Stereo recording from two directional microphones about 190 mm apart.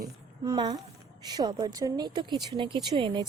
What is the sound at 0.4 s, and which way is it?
Speech, 20° right (ahead or behind).